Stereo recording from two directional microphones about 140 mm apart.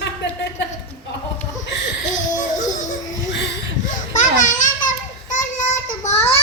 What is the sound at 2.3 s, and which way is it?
Music, 60° left (ahead or behind).